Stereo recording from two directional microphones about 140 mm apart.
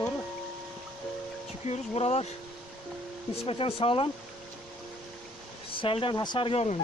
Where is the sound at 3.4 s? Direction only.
40° left (ahead or behind).